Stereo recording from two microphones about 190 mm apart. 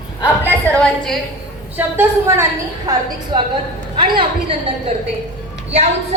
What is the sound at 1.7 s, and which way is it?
A woman's voice, 10° right (ahead or behind).